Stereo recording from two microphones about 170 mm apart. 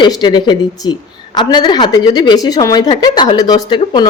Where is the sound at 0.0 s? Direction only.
25° left (ahead or behind).